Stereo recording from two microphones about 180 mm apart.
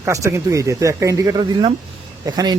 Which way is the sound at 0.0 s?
15° right (ahead or behind).